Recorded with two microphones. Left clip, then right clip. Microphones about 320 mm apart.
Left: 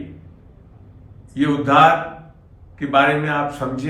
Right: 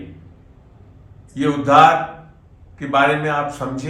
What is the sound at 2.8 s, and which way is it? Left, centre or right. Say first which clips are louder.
A man's voice: even; centre.